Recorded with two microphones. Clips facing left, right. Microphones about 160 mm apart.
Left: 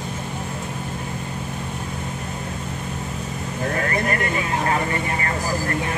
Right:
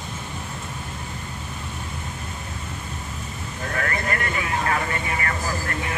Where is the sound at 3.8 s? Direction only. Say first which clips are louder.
Left 2 dB; 30° left (ahead or behind).